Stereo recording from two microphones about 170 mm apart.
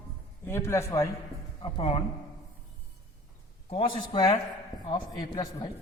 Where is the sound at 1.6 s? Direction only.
30° left (ahead or behind).